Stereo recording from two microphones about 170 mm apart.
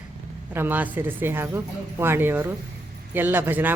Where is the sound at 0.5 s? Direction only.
10° right (ahead or behind).